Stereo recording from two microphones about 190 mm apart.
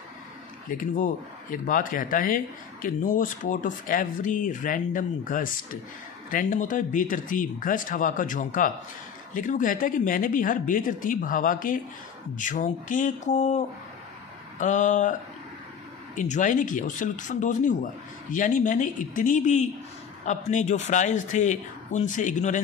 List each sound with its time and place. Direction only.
0.7 s a man's voice: 45° left (ahead or behind)
14.6 s a man's voice: 40° left (ahead or behind)
16.2 s a man's voice: 40° left (ahead or behind)